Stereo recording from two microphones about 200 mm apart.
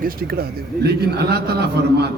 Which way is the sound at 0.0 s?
50° right (ahead or behind).